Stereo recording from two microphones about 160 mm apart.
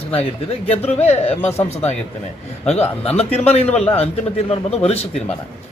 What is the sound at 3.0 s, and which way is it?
A man's voice, 40° left (ahead or behind).